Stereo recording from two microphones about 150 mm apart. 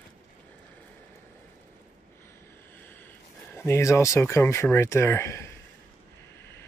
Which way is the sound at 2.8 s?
15° left (ahead or behind).